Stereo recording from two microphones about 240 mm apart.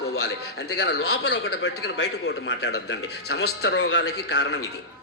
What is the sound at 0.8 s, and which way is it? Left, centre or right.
A man's voice, left.